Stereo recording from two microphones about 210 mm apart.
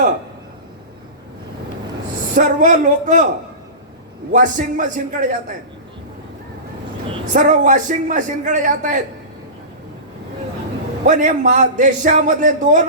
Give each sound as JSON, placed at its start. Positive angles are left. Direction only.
{"t": 2.3, "sound": "a man's voice", "side_deg": -35}
{"t": 4.3, "sound": "a man's voice", "side_deg": -35}
{"t": 7.3, "sound": "a man's voice", "side_deg": -35}
{"t": 11.0, "sound": "a man's voice", "side_deg": -35}